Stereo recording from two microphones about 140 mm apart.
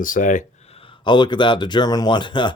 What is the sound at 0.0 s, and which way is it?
Speech, 70° left (ahead or behind).